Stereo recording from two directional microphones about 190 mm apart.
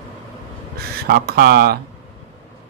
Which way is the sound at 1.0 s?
55° right (ahead or behind).